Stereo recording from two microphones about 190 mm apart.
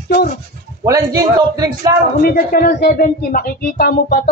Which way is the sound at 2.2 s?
50° left (ahead or behind).